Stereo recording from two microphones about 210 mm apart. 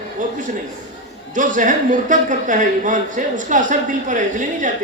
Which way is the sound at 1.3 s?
40° right (ahead or behind).